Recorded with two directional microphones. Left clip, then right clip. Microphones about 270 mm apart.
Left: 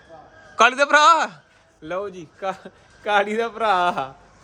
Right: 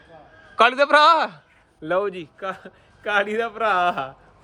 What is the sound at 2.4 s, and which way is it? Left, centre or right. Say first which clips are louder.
A man's voice: left 4 dB; centre.